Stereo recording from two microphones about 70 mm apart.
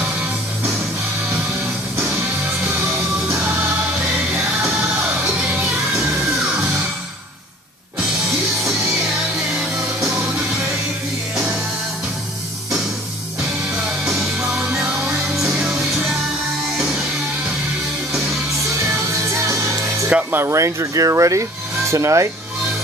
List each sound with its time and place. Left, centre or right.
5.2 s music: centre
8.3 s music: centre
14.8 s music: centre
19.3 s music: right
20.1 s music: centre
20.3 s speech: right